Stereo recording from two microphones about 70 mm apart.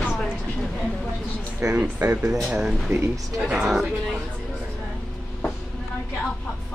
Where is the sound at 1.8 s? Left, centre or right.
Right.